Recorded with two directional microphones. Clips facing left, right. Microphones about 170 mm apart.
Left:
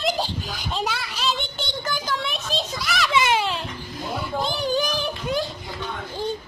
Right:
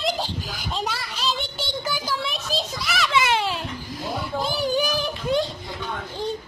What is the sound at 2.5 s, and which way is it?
Children playing, centre (ahead or behind).